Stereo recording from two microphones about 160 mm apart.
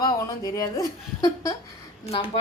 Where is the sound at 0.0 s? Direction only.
25° left (ahead or behind).